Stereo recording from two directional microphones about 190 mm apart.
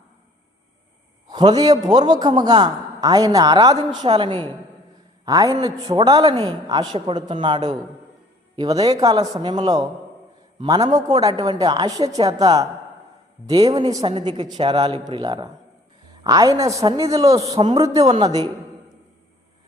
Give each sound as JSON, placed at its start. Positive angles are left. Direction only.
{"t": 1.3, "sound": "a man's voice", "side_deg": -20}